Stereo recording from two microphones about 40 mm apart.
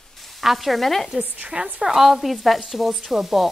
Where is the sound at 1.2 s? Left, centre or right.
Right.